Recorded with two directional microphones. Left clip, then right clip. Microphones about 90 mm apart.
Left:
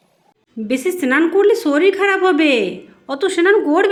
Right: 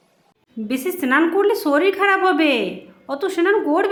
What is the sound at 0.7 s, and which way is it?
A woman's voice, 20° left (ahead or behind).